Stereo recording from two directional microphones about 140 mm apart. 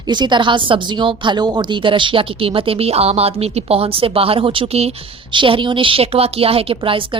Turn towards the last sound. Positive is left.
turn(degrees=-40)  # may be behind; listen again after turning